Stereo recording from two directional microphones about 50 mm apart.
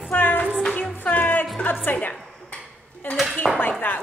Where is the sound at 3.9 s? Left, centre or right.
Left.